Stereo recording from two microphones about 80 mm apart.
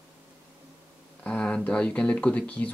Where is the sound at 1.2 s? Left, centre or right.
Centre.